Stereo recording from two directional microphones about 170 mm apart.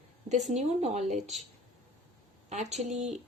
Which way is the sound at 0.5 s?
40° right (ahead or behind).